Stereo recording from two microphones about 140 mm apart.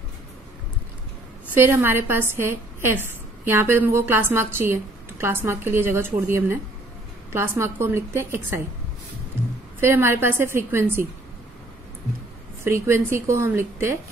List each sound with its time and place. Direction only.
1.5 s a woman's voice: 15° right (ahead or behind)
9.8 s a woman's voice: 15° right (ahead or behind)
12.6 s a woman's voice: 20° right (ahead or behind)